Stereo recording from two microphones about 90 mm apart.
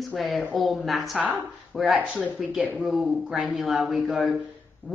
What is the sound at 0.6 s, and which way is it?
Speech, centre (ahead or behind).